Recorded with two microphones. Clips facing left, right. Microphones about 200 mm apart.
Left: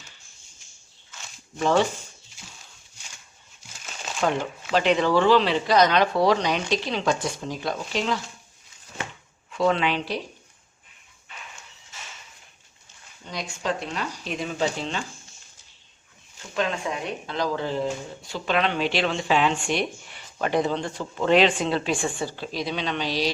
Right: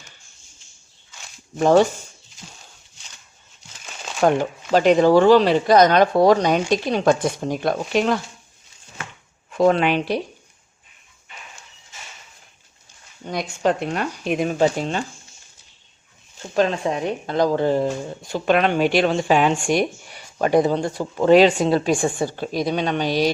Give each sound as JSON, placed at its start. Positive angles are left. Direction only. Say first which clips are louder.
{"t": 1.5, "sound": "speech", "louder": "right 7 dB", "side_deg": -45}
{"t": 4.2, "sound": "speech", "louder": "right 7 dB", "side_deg": -50}
{"t": 9.5, "sound": "speech", "louder": "right 6 dB", "side_deg": -45}
{"t": 13.2, "sound": "speech", "louder": "right 8 dB", "side_deg": -55}
{"t": 16.6, "sound": "speech", "louder": "right 7 dB", "side_deg": -40}